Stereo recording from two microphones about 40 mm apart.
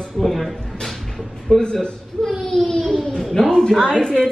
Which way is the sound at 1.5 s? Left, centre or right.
Centre.